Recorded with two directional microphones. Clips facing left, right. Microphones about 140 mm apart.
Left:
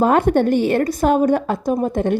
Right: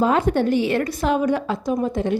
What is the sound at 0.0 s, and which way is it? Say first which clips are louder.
A woman's voice: left 4 dB; 50° left (ahead or behind).